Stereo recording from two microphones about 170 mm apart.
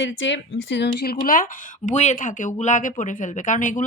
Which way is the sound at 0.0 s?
90° left.